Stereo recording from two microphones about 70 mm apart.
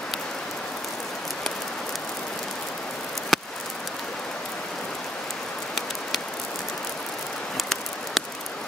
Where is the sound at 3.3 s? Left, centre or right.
Centre.